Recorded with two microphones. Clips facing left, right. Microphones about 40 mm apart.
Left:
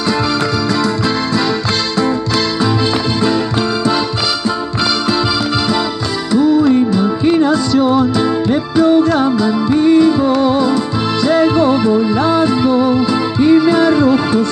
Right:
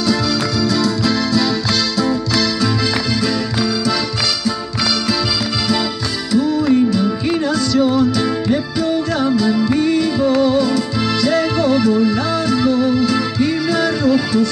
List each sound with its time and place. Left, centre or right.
0.7 s music: left
6.3 s music: left
9.5 s music: centre